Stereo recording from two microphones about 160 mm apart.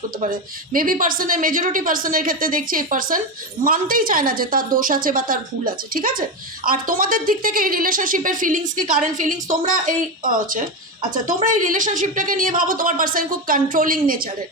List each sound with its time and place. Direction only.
0.2 s a woman's voice: 60° right (ahead or behind)